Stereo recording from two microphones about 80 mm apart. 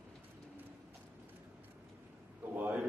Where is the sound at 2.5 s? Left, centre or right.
Right.